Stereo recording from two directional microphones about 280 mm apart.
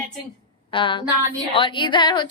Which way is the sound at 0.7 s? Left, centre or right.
Centre.